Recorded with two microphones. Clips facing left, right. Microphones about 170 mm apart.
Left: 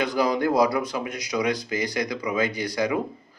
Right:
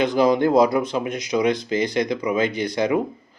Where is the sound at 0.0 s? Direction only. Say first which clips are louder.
Right 5 dB; 25° right (ahead or behind).